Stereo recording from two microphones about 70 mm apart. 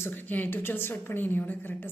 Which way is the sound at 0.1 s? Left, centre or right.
Left.